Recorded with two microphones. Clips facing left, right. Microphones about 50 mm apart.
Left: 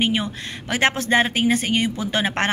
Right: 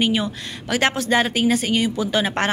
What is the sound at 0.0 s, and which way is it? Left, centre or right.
A woman's voice, left.